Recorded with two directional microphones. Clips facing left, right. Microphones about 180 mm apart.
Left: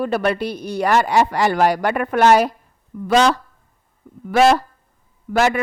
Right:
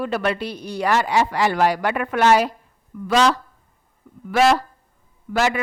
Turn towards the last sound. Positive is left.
turn(degrees=50)  # may be behind; listen again after turning